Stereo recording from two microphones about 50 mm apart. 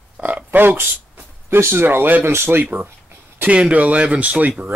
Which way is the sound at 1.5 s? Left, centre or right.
Right.